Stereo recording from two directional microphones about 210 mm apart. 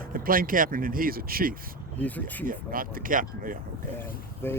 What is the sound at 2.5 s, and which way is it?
Speech, 40° right (ahead or behind).